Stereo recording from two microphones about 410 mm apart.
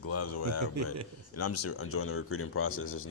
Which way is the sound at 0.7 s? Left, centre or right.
Right.